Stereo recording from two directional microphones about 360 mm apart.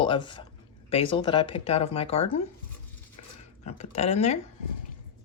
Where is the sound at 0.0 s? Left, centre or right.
Centre.